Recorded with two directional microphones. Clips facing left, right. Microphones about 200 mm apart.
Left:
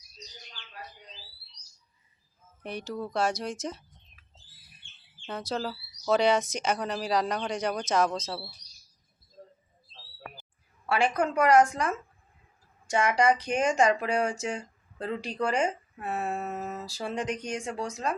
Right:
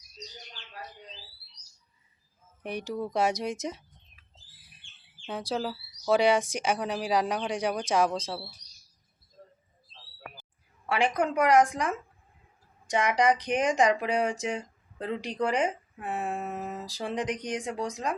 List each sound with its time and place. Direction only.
2.6 s speech: 15° right (ahead or behind)
5.2 s speech: 10° right (ahead or behind)
10.8 s speech: 15° right (ahead or behind)